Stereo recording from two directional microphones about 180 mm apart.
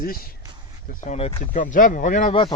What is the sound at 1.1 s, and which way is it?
Speech, 35° left (ahead or behind).